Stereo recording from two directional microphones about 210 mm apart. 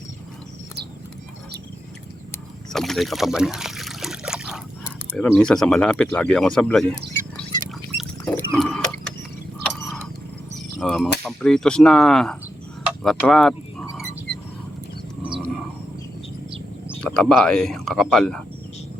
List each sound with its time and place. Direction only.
2.7 s water: centre (ahead or behind)
5.1 s speech: 5° left (ahead or behind)
8.4 s a sound: 5° left (ahead or behind)
11.2 s speech: centre (ahead or behind)
12.8 s a sound: centre (ahead or behind)
17.0 s speech: 5° left (ahead or behind)